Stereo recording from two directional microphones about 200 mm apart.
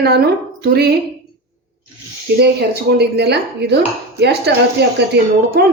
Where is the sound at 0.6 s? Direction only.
55° right (ahead or behind).